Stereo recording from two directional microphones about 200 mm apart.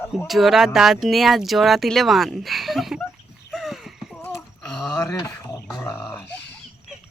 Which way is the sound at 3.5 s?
Centre (ahead or behind).